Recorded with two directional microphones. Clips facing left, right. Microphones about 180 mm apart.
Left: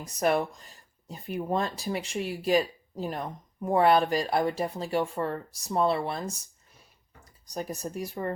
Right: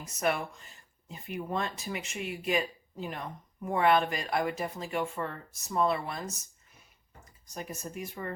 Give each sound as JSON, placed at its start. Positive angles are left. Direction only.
{"t": 0.0, "sound": "speech", "side_deg": 35}
{"t": 7.4, "sound": "speech", "side_deg": 35}